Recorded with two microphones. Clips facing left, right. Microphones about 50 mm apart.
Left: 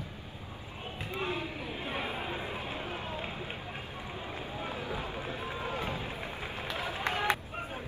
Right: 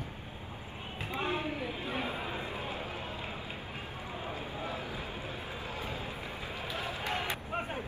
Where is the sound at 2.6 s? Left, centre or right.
Left.